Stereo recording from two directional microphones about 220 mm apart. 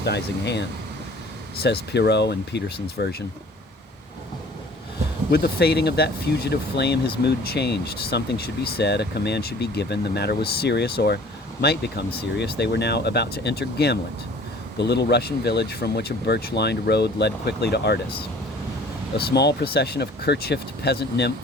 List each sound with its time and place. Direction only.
0.0 s speech: 50° left (ahead or behind)
1.6 s speech: 50° left (ahead or behind)
5.3 s speech: 45° left (ahead or behind)
19.1 s speech: 50° left (ahead or behind)